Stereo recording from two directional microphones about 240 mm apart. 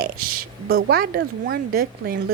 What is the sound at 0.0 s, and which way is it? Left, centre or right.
A woman's voice, right.